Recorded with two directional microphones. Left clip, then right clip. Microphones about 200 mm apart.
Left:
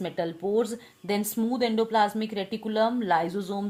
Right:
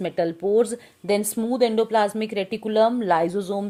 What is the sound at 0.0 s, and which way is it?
A woman's voice, 50° right (ahead or behind).